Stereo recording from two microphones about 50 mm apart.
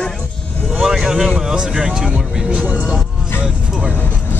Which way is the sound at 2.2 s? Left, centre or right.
Centre.